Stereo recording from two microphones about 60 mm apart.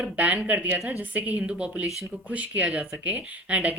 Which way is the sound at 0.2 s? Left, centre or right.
Right.